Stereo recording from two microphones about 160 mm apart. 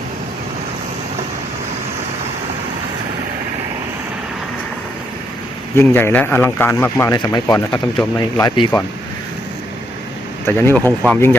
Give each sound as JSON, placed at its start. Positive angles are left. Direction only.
{"t": 5.7, "sound": "speech", "side_deg": 15}
{"t": 10.4, "sound": "speech", "side_deg": 15}